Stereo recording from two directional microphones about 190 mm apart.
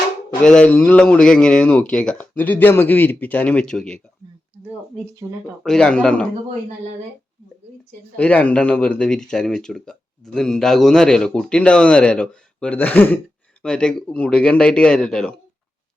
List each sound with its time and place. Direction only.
0.4 s speech: 5° left (ahead or behind)
5.2 s speech: 15° right (ahead or behind)
5.6 s speech: 5° left (ahead or behind)
8.1 s speech: 5° left (ahead or behind)